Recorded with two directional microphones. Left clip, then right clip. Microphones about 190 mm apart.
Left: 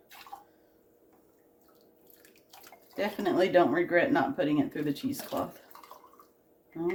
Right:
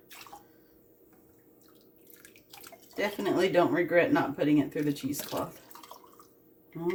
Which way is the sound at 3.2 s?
30° left (ahead or behind).